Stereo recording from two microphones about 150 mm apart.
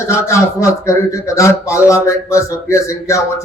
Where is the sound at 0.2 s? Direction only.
20° left (ahead or behind).